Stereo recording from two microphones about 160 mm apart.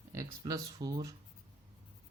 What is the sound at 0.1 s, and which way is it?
Speech, 20° right (ahead or behind).